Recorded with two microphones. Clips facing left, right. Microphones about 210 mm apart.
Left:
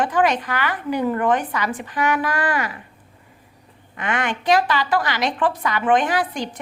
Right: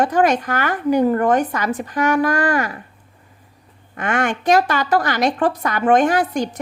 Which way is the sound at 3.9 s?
45° right (ahead or behind).